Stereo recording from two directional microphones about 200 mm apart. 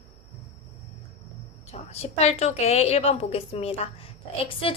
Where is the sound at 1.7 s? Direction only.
30° left (ahead or behind).